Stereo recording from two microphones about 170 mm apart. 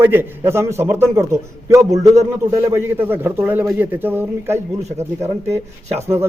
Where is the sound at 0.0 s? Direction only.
15° right (ahead or behind).